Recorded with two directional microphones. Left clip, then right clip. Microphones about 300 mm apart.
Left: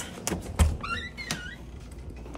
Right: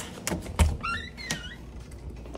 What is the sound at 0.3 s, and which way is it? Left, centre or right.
Thunk, centre.